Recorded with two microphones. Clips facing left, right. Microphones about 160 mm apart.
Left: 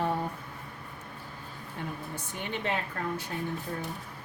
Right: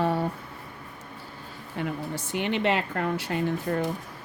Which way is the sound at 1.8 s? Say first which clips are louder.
Right 7 dB; 90° right.